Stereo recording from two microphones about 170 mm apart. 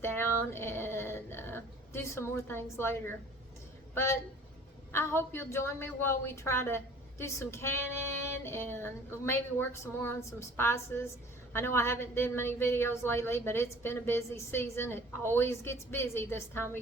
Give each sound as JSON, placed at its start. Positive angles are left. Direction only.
{"t": 0.0, "sound": "a woman's voice", "side_deg": 15}